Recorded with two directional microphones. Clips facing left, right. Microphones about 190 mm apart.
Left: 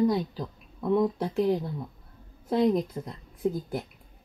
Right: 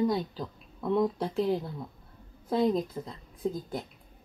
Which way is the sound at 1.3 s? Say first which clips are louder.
Left 3 dB; 15° left (ahead or behind).